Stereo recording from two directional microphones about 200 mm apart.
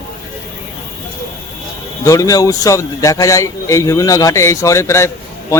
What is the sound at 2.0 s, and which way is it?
A man's voice, 15° left (ahead or behind).